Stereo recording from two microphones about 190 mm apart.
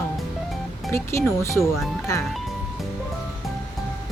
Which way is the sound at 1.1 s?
15° left (ahead or behind).